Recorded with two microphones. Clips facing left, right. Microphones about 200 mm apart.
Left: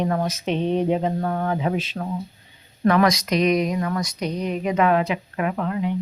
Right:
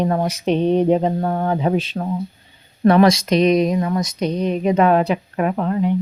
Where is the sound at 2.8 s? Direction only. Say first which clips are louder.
Right 5 dB; 30° right (ahead or behind).